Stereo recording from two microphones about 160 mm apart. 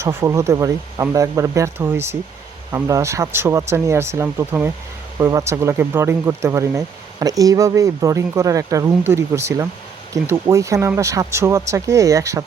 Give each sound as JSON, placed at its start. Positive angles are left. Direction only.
{"t": 0.0, "sound": "speech", "side_deg": -15}